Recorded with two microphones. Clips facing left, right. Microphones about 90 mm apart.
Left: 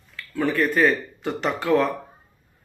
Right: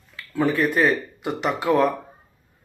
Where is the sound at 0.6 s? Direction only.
10° right (ahead or behind).